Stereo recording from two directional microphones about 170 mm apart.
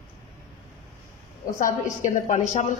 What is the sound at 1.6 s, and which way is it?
A woman's voice, 45° left (ahead or behind).